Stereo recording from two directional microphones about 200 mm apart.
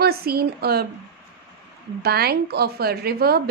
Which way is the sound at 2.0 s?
50° right (ahead or behind).